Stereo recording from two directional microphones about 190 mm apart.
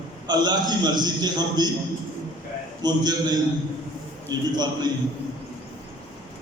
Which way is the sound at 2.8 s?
20° right (ahead or behind).